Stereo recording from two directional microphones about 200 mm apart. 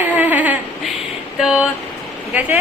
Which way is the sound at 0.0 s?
10° right (ahead or behind).